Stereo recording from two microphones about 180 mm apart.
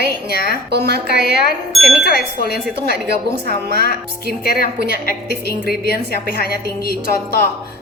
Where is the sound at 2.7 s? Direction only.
65° right (ahead or behind).